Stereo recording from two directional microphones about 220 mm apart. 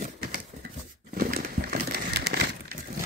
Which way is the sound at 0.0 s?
45° right (ahead or behind).